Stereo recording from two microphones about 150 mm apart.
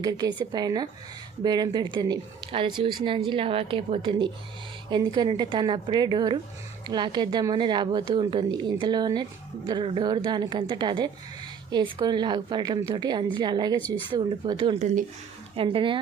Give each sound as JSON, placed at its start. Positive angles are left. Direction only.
{"t": 0.0, "sound": "a woman's voice", "side_deg": -25}
{"t": 14.8, "sound": "speech", "side_deg": -50}
{"t": 15.5, "sound": "a woman's voice", "side_deg": -35}